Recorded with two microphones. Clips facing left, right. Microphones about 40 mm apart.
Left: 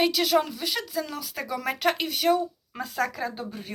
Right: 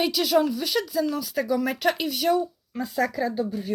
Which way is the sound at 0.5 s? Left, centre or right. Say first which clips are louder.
Right 4 dB; centre.